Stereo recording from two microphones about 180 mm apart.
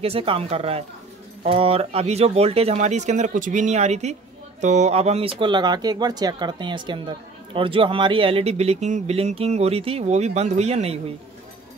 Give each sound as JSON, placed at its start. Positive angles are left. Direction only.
{"t": 0.0, "sound": "speech", "side_deg": -30}